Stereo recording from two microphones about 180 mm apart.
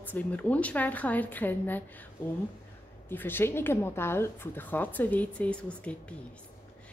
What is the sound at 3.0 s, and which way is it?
A woman's voice, 10° left (ahead or behind).